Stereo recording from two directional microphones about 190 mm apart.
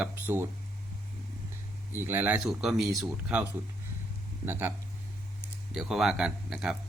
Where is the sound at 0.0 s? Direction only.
10° right (ahead or behind).